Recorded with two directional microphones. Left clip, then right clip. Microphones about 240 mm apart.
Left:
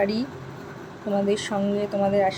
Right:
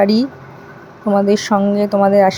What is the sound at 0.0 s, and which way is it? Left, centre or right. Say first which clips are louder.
A woman's voice: right 10 dB; right.